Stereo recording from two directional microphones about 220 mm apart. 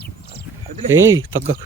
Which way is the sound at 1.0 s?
10° right (ahead or behind).